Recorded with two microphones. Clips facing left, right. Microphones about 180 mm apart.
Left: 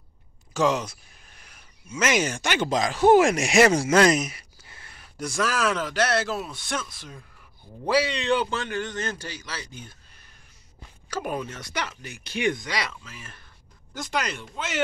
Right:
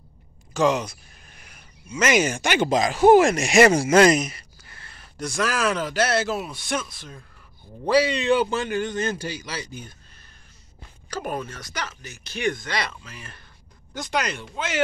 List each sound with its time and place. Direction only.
0.5 s speech: 5° left (ahead or behind)
3.2 s speech: 5° left (ahead or behind)
11.3 s speech: 20° left (ahead or behind)
12.6 s speech: 5° left (ahead or behind)